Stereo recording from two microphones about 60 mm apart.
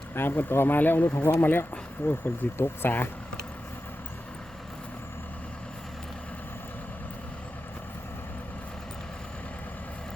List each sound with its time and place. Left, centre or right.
0.1 s speech: left